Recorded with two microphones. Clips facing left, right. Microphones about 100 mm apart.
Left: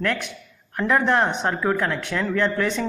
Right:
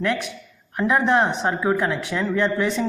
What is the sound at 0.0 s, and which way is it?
A man's voice, 5° right (ahead or behind).